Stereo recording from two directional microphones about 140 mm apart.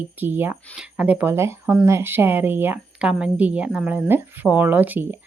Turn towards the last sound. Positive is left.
turn(degrees=-10)  # may be behind; listen again after turning